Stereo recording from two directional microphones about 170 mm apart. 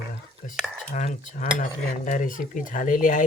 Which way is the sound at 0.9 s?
45° left (ahead or behind).